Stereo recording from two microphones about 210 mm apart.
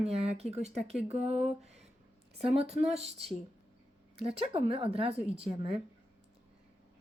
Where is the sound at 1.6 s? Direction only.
30° right (ahead or behind).